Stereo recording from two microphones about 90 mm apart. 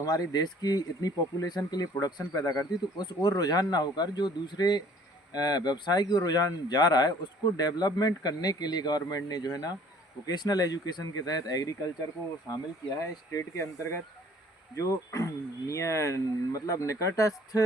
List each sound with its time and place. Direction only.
0.0 s speech: 45° left (ahead or behind)
13.3 s speech: 30° left (ahead or behind)